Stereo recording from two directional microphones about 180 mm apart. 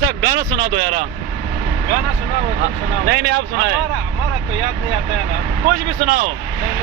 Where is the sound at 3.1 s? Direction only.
65° right (ahead or behind).